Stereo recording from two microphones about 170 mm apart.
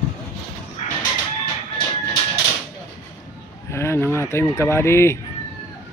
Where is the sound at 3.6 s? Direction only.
15° left (ahead or behind).